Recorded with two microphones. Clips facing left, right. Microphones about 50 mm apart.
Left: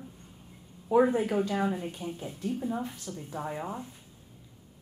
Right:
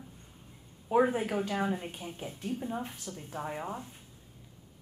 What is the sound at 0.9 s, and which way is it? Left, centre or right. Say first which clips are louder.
A woman's voice: left 3 dB; centre.